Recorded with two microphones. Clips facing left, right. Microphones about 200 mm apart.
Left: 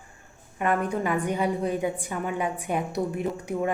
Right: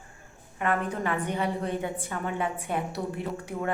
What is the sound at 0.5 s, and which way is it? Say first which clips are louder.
Speech: left 3 dB; 15° left (ahead or behind).